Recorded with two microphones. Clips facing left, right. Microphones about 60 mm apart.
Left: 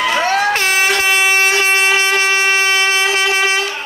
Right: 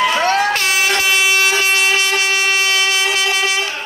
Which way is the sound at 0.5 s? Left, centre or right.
Left.